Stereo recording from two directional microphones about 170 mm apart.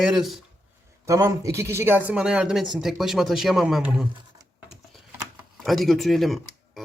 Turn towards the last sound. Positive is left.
turn(degrees=0)  # may be behind; listen again after turning